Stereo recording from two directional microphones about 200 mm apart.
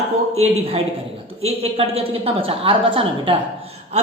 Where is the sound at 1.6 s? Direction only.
30° right (ahead or behind).